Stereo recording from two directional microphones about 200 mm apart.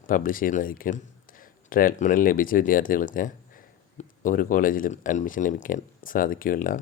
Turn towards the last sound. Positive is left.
turn(degrees=45)  # may be behind; listen again after turning